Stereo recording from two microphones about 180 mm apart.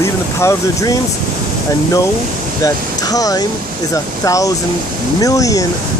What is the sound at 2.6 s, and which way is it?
Speech, 20° left (ahead or behind).